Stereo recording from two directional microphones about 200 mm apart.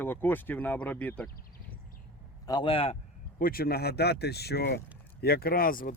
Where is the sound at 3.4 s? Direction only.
50° left (ahead or behind).